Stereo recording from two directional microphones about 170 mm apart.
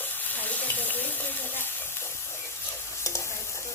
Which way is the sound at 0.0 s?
10° left (ahead or behind).